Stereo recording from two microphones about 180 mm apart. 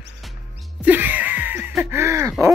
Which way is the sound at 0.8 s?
10° right (ahead or behind).